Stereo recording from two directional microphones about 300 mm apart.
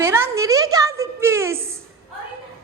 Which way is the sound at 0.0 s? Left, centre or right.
Centre.